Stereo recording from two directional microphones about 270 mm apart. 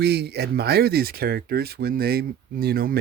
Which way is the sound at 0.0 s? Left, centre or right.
Right.